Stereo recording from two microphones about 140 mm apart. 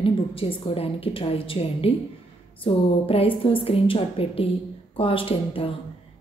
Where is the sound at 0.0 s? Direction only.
40° left (ahead or behind).